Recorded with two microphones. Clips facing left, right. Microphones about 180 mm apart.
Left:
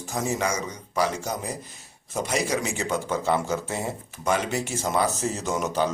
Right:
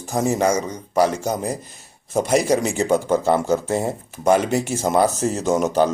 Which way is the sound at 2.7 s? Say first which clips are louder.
Right 8 dB; 45° right (ahead or behind).